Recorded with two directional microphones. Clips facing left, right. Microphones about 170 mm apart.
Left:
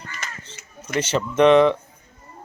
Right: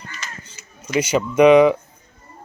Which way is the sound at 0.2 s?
55° left (ahead or behind).